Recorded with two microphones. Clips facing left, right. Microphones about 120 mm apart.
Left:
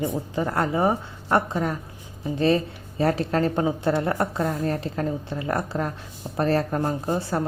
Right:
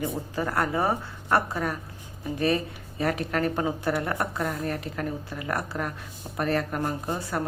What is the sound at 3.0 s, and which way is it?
Speech, 30° left (ahead or behind).